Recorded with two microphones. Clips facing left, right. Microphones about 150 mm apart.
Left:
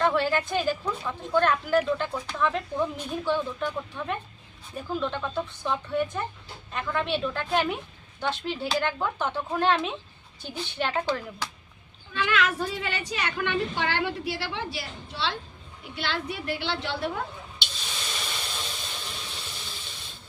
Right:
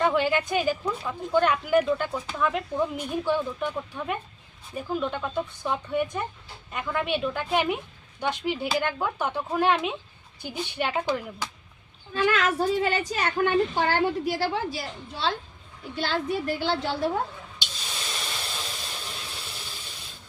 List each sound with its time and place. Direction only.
0.0 s speech: 10° right (ahead or behind)
12.1 s a woman's voice: 40° right (ahead or behind)
18.0 s hiss: centre (ahead or behind)